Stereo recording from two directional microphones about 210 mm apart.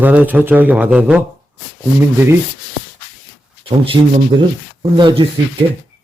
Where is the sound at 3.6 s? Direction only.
25° right (ahead or behind).